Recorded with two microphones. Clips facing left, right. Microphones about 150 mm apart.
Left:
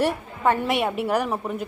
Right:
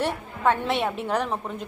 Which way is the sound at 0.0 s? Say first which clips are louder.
Left 2 dB; 10° left (ahead or behind).